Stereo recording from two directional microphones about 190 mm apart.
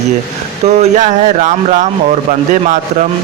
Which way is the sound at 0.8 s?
40° right (ahead or behind).